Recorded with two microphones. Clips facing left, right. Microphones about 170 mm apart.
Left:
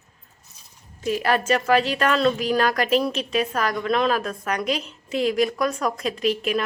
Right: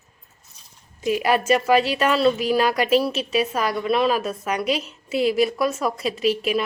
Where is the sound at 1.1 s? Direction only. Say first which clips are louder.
Right 2 dB; 10° right (ahead or behind).